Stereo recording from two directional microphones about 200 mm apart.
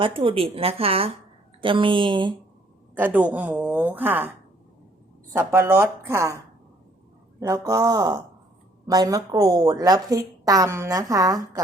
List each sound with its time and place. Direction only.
0.0 s a woman's voice: 25° right (ahead or behind)
3.0 s a woman's voice: 10° right (ahead or behind)
5.3 s a woman's voice: 10° right (ahead or behind)